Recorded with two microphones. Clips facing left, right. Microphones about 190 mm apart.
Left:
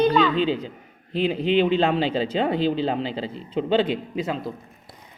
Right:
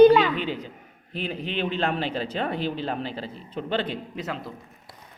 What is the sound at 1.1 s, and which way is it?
A man's voice, 90° left.